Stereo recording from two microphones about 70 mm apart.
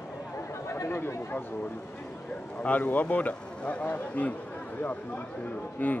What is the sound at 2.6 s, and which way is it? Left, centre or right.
Speech, left.